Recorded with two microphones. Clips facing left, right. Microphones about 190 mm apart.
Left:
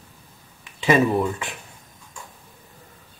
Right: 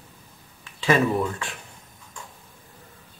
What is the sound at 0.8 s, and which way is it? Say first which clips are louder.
Speech: left 3 dB; 20° left (ahead or behind).